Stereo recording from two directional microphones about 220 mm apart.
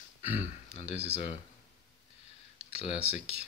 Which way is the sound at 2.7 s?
25° left (ahead or behind).